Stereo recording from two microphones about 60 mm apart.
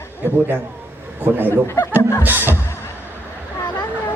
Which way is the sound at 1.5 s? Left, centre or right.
Left.